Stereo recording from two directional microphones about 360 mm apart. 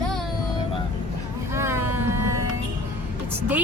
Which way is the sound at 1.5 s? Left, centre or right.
Centre.